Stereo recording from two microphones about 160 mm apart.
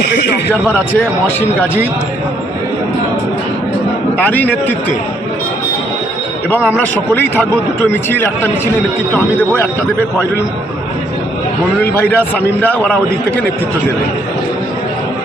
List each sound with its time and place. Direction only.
0.0 s a man's voice: 90° left
1.4 s a man's voice: 15° left (ahead or behind)
4.2 s a man's voice: 10° left (ahead or behind)
6.7 s a man's voice: 15° left (ahead or behind)
11.8 s a man's voice: 10° left (ahead or behind)